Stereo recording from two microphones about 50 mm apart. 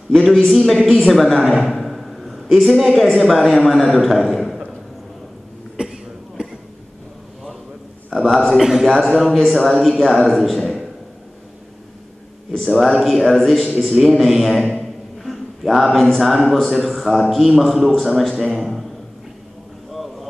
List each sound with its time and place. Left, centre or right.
0.1 s a man's voice: centre
5.8 s cough: centre
8.1 s a man's voice: centre
12.5 s a man's voice: centre
19.9 s a sound: centre